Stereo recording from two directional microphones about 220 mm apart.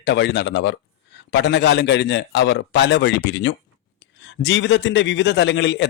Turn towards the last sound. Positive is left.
turn(degrees=55)  # may be behind; listen again after turning